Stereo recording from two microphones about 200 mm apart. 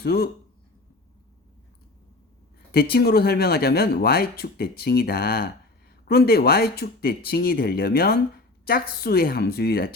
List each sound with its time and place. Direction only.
0.0 s speech: 50° left (ahead or behind)
2.7 s speech: 50° left (ahead or behind)